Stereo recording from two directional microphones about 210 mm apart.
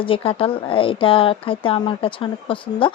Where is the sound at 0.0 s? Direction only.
25° left (ahead or behind).